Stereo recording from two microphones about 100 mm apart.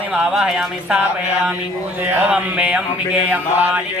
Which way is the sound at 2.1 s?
20° right (ahead or behind).